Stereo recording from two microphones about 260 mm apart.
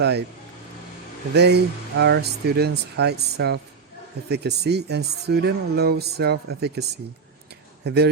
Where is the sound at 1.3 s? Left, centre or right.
Right.